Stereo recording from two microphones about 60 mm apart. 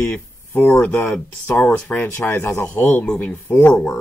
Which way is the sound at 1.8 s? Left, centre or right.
Left.